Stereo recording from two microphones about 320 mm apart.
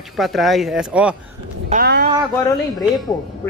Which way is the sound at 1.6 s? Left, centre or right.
Right.